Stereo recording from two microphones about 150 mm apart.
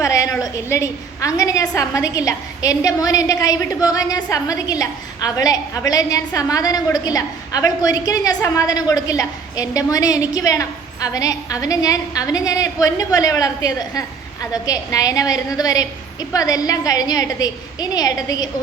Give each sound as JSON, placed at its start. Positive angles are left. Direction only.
{"t": 0.0, "sound": "a woman's voice", "side_deg": 20}